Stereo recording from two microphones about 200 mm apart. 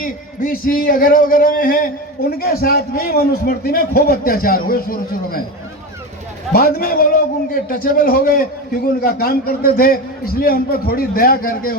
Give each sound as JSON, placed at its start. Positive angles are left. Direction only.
{"t": 0.0, "sound": "a man's voice", "side_deg": 45}
{"t": 6.5, "sound": "a man's voice", "side_deg": 50}